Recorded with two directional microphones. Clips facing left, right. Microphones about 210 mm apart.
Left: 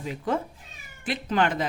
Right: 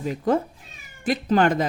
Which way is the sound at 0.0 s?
45° right (ahead or behind).